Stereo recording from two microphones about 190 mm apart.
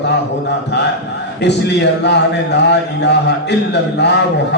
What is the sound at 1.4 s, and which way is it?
A man's voice, 65° left (ahead or behind).